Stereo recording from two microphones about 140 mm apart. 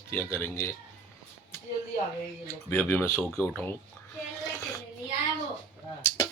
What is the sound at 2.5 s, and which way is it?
Speech, 15° left (ahead or behind).